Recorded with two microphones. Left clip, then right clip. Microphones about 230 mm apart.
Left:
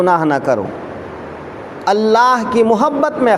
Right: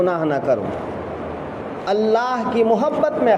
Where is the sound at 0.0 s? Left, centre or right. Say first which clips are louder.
Left 6 dB; left.